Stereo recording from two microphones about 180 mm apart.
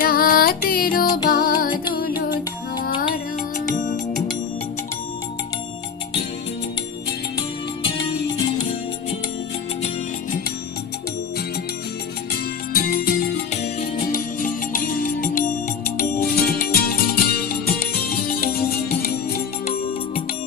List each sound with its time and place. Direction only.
0.0 s music: 55° left (ahead or behind)
7.3 s music: 30° left (ahead or behind)
12.7 s music: 55° left (ahead or behind)
13.5 s music: 35° left (ahead or behind)
14.1 s music: 50° left (ahead or behind)